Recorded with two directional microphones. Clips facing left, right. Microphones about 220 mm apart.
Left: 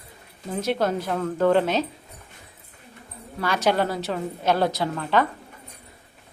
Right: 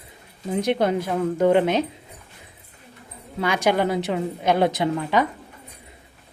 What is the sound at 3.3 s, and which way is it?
A woman's voice, 15° right (ahead or behind).